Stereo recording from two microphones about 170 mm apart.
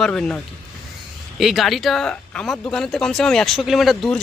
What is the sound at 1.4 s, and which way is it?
Speech, centre (ahead or behind).